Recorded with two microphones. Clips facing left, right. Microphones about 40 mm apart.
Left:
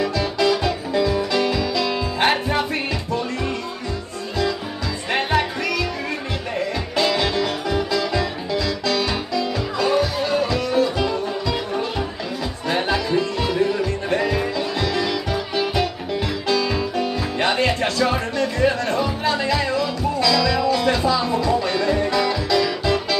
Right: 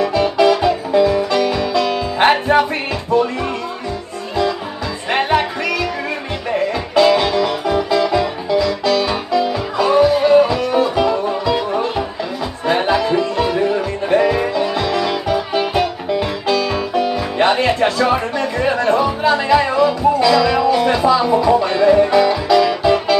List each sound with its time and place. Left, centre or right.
0.4 s music: right
5.1 s music: centre